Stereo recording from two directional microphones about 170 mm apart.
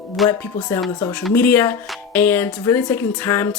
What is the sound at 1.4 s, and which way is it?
Speech, 10° left (ahead or behind).